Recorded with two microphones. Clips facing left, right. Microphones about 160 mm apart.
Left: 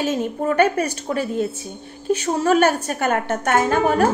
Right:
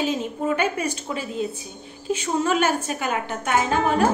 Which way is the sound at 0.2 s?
50° left (ahead or behind).